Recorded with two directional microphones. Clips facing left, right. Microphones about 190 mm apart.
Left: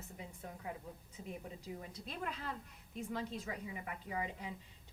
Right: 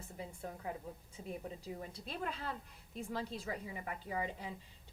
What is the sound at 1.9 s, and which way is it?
A woman's voice, 30° right (ahead or behind).